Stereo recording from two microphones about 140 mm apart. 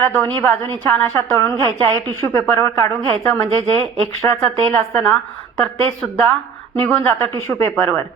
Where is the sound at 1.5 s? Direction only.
30° right (ahead or behind).